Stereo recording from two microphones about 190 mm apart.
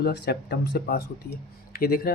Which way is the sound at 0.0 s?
60° left (ahead or behind).